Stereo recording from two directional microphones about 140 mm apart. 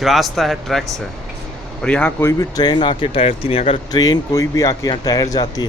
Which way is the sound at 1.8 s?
10° left (ahead or behind).